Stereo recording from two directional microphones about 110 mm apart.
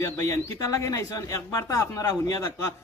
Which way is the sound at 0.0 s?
30° left (ahead or behind).